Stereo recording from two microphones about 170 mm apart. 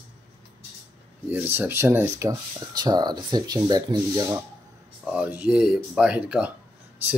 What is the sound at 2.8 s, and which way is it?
Speech, 25° right (ahead or behind).